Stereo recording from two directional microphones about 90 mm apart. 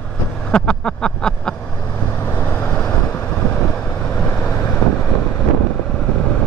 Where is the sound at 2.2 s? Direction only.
20° left (ahead or behind).